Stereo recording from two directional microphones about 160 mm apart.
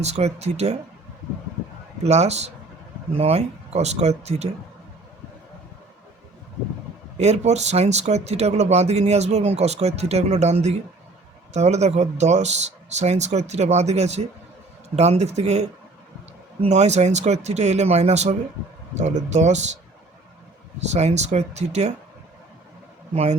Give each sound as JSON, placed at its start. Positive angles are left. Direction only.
{"t": 0.0, "sound": "speech", "side_deg": -45}
{"t": 2.0, "sound": "speech", "side_deg": -45}
{"t": 7.2, "sound": "speech", "side_deg": -45}
{"t": 20.9, "sound": "speech", "side_deg": -45}